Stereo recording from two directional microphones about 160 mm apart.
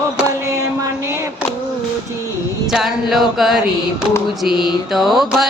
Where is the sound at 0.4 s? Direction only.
20° right (ahead or behind).